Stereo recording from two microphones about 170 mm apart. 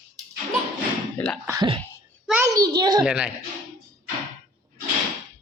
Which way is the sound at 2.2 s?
5° right (ahead or behind).